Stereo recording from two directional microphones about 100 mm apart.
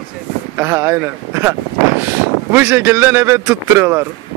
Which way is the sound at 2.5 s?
25° right (ahead or behind).